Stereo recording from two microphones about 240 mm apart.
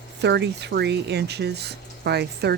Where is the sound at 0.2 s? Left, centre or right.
Right.